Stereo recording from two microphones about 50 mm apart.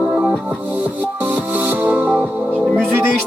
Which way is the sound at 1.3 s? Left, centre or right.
Right.